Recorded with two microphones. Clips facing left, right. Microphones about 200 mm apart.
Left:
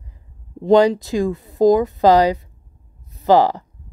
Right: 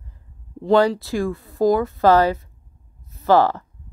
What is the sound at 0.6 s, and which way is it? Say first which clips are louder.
Speech: left 3 dB; 20° left (ahead or behind).